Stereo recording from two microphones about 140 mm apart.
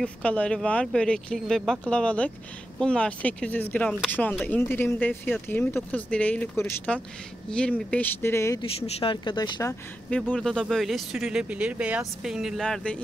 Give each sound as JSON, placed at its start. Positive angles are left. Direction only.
{"t": 0.0, "sound": "speech", "side_deg": 10}
{"t": 8.5, "sound": "speech", "side_deg": 45}
{"t": 10.0, "sound": "speech", "side_deg": 10}